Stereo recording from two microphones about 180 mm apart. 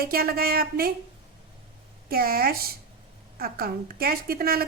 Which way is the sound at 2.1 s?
55° right (ahead or behind).